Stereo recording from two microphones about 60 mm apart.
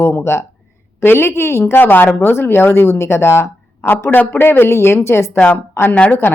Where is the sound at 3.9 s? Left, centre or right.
Left.